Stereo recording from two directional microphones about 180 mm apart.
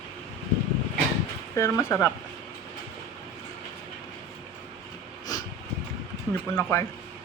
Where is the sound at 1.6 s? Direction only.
15° left (ahead or behind).